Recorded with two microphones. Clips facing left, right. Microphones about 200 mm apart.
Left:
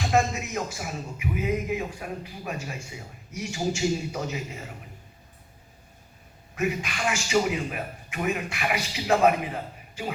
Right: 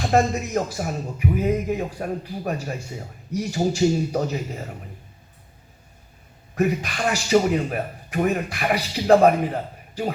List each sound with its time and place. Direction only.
0.0 s speech: 40° right (ahead or behind)
6.6 s speech: 40° right (ahead or behind)